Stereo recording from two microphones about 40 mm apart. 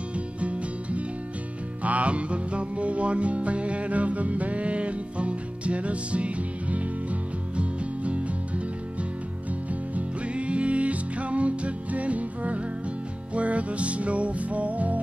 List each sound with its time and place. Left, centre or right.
0.4 s music: right
9.9 s music: right